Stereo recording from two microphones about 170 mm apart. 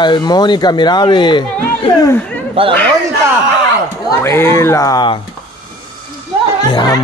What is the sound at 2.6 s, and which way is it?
Speech, 30° right (ahead or behind).